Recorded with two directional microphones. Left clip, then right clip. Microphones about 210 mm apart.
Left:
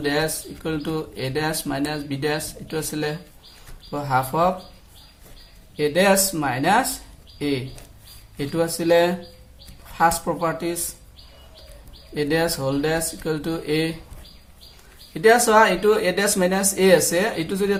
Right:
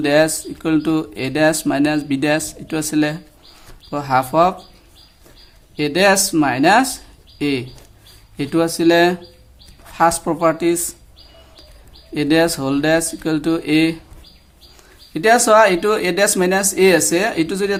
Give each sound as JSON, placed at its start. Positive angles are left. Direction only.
{"t": 0.0, "sound": "speech", "side_deg": -45}
{"t": 5.7, "sound": "speech", "side_deg": -45}
{"t": 12.1, "sound": "speech", "side_deg": -45}
{"t": 15.1, "sound": "speech", "side_deg": -50}